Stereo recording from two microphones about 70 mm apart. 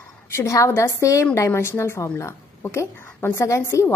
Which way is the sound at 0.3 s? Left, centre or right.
Left.